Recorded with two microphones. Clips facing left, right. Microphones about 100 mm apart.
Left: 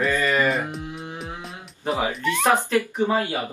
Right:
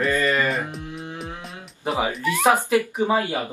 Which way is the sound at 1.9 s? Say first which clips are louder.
Even; centre (ahead or behind).